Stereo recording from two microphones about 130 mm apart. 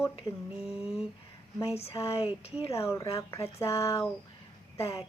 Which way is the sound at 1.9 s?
50° left (ahead or behind).